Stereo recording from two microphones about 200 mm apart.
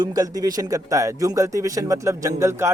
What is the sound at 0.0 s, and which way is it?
Speech, 20° right (ahead or behind).